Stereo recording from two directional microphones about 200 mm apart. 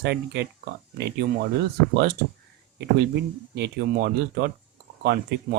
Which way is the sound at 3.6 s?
55° right (ahead or behind).